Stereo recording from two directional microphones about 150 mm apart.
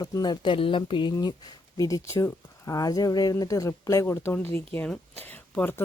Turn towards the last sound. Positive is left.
turn(degrees=15)  # may be behind; listen again after turning